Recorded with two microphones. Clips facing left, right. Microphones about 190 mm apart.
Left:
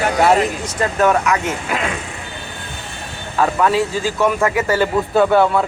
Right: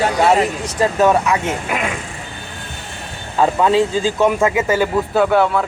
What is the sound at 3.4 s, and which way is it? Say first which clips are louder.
Speech: right 2 dB; 20° right (ahead or behind).